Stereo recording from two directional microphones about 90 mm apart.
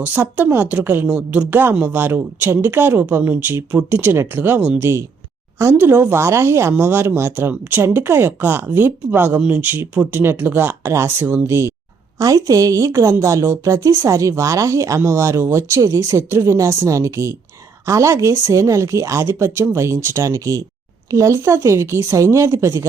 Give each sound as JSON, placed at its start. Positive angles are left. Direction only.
{"t": 0.0, "sound": "speech", "side_deg": -20}
{"t": 12.2, "sound": "a woman's voice", "side_deg": -40}